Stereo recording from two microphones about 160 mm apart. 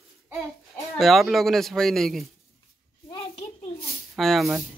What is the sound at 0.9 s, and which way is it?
Speech, centre (ahead or behind).